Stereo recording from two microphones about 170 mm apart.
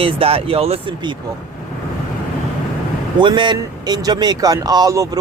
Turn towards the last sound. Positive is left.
turn(degrees=-20)  # may be behind; listen again after turning